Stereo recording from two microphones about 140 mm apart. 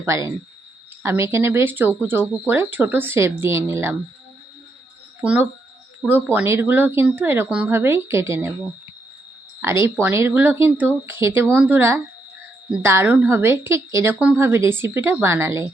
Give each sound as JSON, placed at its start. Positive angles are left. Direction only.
{"t": 0.0, "sound": "a woman's voice", "side_deg": -20}
{"t": 5.2, "sound": "speech", "side_deg": -10}
{"t": 9.6, "sound": "a woman's voice", "side_deg": -20}